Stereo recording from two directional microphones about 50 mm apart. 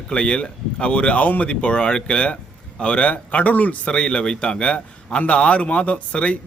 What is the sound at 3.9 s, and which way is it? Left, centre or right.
Speech, centre.